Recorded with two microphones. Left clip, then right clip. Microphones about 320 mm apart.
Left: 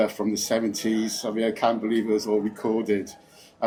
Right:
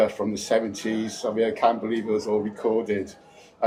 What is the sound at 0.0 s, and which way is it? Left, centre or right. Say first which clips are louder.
Speech: right 1 dB; left.